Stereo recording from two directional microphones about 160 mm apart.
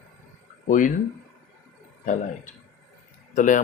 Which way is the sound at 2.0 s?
50° left (ahead or behind).